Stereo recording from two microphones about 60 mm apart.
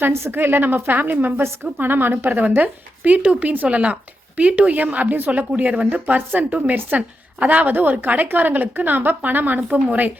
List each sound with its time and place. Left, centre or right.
0.0 s a woman's voice: right
5.9 s a woman's voice: right